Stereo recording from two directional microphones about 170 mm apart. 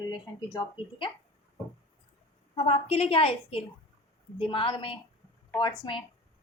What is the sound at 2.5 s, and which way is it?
A woman's voice, 35° left (ahead or behind).